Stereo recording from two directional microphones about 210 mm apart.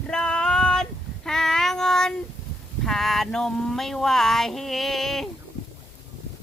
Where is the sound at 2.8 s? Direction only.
Centre (ahead or behind).